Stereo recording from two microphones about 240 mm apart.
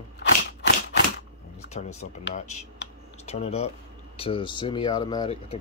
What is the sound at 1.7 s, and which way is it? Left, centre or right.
Speech, left.